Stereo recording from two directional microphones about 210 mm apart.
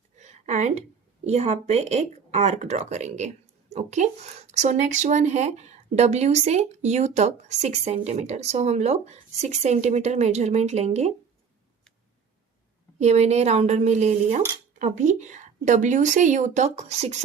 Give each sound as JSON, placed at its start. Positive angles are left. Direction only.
{"t": 0.2, "sound": "a sound", "side_deg": -35}
{"t": 1.2, "sound": "speech", "side_deg": -30}
{"t": 13.0, "sound": "speech", "side_deg": -30}